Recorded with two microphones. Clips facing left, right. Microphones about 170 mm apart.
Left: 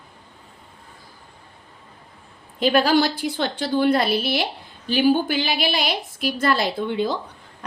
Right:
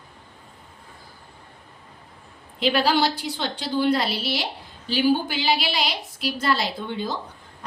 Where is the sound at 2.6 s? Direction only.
45° left (ahead or behind).